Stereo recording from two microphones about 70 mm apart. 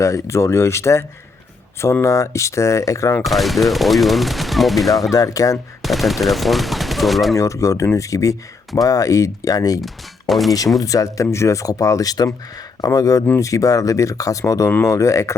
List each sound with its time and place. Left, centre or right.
0.0 s speech: left
3.2 s speech: centre
5.1 s speech: left
5.8 s speech: centre
7.3 s speech: left
9.8 s speech: centre
10.8 s speech: left